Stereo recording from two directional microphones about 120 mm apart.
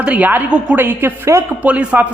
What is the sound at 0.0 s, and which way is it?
A woman's voice, 10° right (ahead or behind).